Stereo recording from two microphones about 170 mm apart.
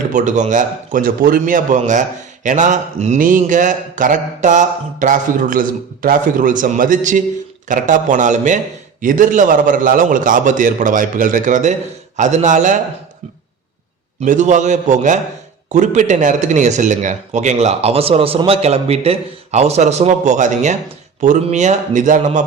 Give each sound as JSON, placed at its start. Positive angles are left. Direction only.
{"t": 0.1, "sound": "a man's voice", "side_deg": -45}
{"t": 14.2, "sound": "a man's voice", "side_deg": -45}